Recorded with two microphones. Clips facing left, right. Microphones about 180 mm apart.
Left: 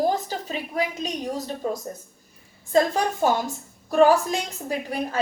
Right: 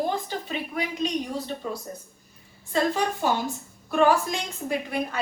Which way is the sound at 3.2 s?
45° left (ahead or behind).